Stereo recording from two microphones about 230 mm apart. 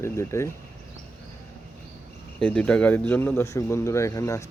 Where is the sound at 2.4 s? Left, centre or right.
Centre.